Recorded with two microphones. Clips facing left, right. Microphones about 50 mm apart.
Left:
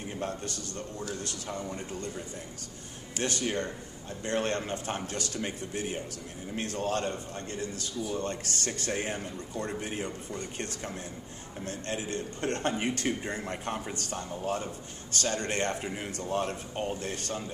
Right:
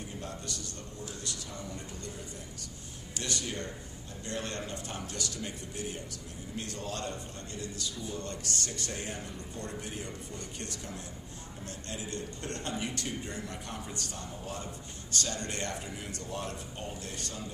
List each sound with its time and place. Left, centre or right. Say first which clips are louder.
0.2 s a man's voice: left 6 dB; left
3.2 s a man's voice: left 6 dB; left